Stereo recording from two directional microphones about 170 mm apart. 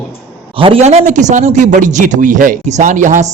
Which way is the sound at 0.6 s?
35° right (ahead or behind).